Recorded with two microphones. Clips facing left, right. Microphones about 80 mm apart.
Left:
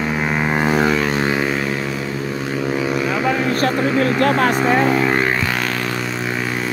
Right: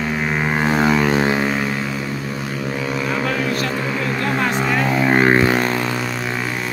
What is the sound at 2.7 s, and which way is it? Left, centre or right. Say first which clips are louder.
Vehicle: left 2 dB; centre.